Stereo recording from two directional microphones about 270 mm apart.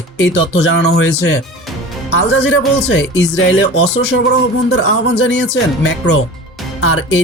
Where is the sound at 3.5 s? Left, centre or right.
Left.